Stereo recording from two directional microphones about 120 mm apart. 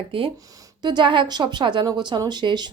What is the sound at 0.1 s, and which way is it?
A woman's voice, 45° right (ahead or behind).